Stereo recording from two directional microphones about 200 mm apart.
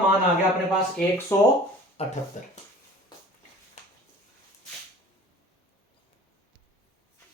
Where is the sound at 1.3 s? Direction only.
10° left (ahead or behind).